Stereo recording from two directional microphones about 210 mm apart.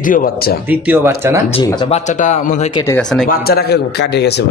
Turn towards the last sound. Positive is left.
turn(degrees=55)  # may be behind; listen again after turning